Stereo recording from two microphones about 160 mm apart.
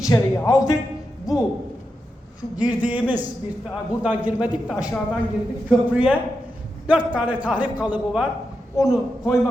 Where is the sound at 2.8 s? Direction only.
10° right (ahead or behind).